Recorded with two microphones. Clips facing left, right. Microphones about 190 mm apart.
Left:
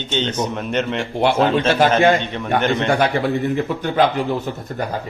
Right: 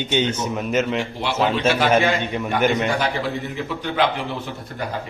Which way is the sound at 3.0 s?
55° left (ahead or behind).